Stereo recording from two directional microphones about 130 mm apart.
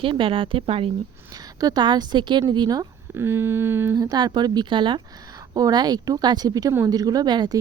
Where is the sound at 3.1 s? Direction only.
15° right (ahead or behind).